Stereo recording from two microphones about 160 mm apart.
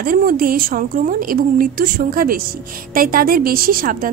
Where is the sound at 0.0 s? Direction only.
65° right (ahead or behind).